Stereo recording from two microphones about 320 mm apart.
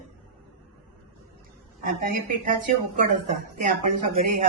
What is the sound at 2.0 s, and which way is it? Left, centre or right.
Speech, right.